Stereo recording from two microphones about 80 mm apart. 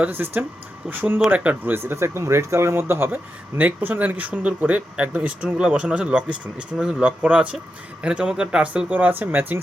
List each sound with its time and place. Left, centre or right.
0.0 s speech: right
1.8 s speech: right